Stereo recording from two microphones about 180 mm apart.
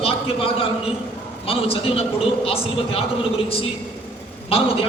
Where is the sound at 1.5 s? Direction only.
30° left (ahead or behind).